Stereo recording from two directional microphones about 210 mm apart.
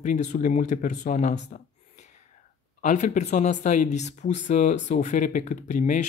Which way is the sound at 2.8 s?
35° left (ahead or behind).